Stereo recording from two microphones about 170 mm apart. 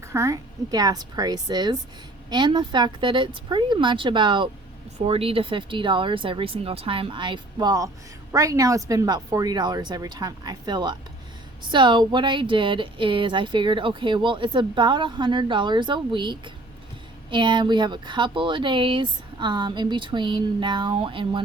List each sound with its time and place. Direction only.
0.0 s speech: 15° right (ahead or behind)